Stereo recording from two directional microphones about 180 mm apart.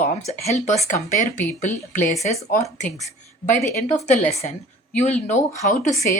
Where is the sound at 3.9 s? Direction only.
40° left (ahead or behind).